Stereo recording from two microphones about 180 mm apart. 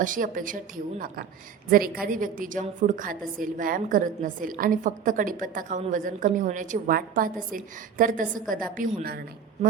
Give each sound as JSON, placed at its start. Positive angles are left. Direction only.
{"t": 0.0, "sound": "a woman's voice", "side_deg": -45}